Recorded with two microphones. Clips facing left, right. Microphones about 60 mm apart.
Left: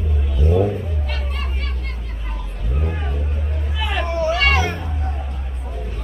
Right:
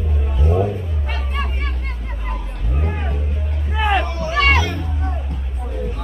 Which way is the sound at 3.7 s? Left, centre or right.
Right.